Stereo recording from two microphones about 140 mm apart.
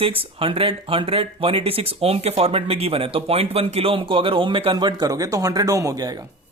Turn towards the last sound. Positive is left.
turn(degrees=-25)  # may be behind; listen again after turning